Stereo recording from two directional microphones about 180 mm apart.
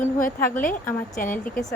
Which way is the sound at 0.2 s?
50° left (ahead or behind).